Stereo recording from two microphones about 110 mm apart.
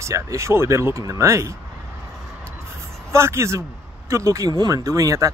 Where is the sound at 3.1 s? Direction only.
25° right (ahead or behind).